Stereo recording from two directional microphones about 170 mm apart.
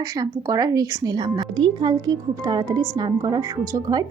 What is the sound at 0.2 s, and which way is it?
A woman's voice, 20° right (ahead or behind).